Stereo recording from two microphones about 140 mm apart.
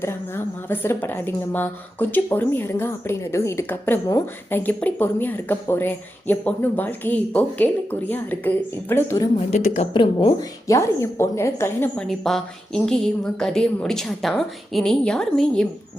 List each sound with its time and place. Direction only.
0.0 s speech: 15° left (ahead or behind)
9.9 s speech: 35° left (ahead or behind)
10.7 s a woman's voice: 20° left (ahead or behind)
11.9 s a woman's voice: centre (ahead or behind)